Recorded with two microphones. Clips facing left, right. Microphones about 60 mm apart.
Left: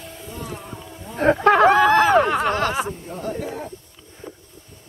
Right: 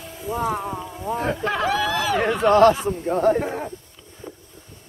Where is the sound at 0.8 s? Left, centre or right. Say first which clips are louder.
Right 6 dB; centre.